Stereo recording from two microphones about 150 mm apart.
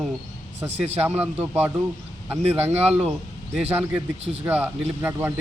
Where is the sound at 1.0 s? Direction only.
10° right (ahead or behind).